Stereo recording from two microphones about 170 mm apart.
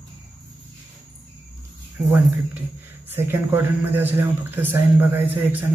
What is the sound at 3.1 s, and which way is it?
A man's voice, 15° right (ahead or behind).